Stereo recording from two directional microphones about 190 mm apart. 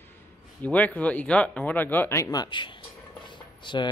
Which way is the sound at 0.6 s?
5° left (ahead or behind).